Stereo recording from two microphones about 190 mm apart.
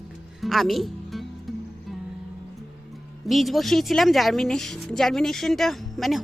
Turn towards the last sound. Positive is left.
turn(degrees=0)  # may be behind; listen again after turning